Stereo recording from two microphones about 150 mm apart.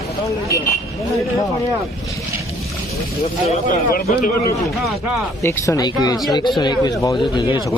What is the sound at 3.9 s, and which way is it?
Speech, 80° left.